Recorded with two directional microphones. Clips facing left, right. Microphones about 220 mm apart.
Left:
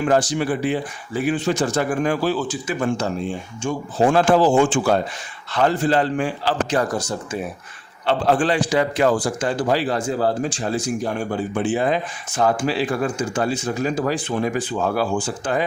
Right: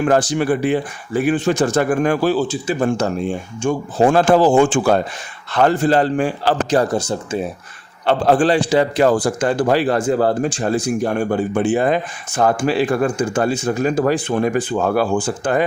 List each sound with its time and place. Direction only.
0.0 s a man's voice: 55° right (ahead or behind)
2.3 s speech: 30° right (ahead or behind)
3.6 s a man's voice: 50° right (ahead or behind)
6.9 s speech: 25° right (ahead or behind)
8.0 s a man's voice: 40° right (ahead or behind)